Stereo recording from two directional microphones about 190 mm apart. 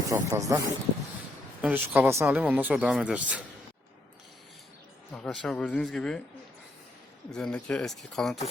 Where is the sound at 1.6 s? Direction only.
10° right (ahead or behind).